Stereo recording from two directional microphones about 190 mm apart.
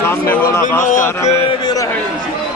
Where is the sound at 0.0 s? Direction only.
10° left (ahead or behind).